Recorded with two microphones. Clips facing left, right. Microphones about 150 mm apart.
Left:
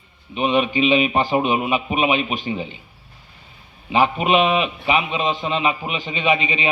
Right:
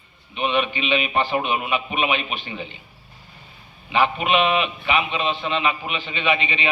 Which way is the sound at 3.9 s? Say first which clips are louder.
Left 3 dB; 40° left (ahead or behind).